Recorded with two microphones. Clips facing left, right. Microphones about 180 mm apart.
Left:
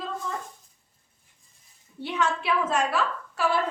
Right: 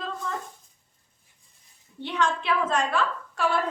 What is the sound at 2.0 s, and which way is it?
A woman's voice, 5° left (ahead or behind).